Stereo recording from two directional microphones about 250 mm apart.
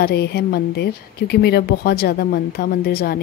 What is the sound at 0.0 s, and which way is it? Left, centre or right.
Speech, left.